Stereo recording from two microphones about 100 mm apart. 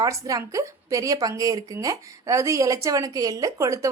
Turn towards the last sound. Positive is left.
turn(degrees=-35)  # may be behind; listen again after turning